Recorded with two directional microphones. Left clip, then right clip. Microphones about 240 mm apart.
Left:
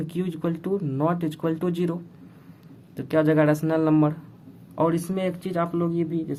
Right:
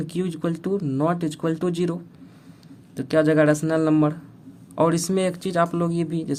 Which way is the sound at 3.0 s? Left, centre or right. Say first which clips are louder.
Right 2 dB; right.